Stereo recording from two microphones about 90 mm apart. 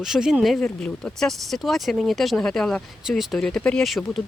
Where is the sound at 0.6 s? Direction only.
10° left (ahead or behind).